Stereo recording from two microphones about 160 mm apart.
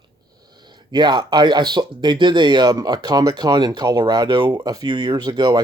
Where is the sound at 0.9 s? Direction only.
30° right (ahead or behind).